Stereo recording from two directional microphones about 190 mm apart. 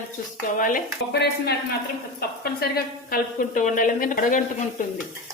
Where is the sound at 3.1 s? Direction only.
45° left (ahead or behind).